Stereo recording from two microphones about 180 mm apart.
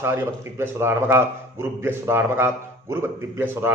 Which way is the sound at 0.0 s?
10° right (ahead or behind).